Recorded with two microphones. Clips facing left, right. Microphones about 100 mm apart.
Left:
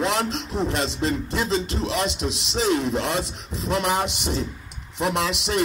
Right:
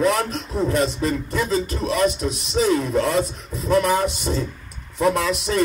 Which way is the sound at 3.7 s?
25° left (ahead or behind).